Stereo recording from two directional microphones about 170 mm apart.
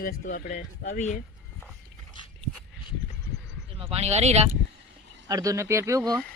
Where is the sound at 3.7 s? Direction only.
35° right (ahead or behind).